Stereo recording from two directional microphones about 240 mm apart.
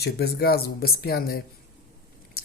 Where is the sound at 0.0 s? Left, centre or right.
Left.